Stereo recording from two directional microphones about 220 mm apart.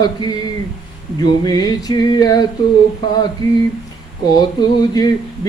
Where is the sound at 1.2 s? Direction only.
20° left (ahead or behind).